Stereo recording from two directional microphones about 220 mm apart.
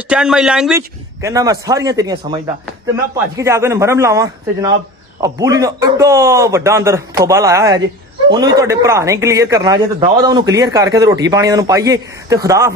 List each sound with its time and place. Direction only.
0.1 s speech: 5° right (ahead or behind)